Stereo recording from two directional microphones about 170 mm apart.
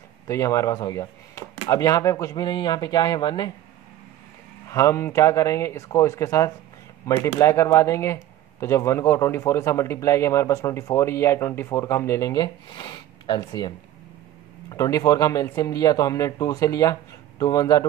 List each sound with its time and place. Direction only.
0.3 s speech: 20° left (ahead or behind)
4.6 s speech: 15° left (ahead or behind)